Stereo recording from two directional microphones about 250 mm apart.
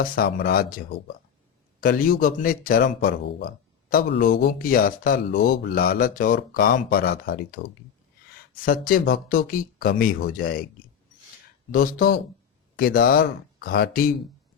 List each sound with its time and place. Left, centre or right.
0.0 s speech: left
1.8 s speech: left
11.7 s speech: left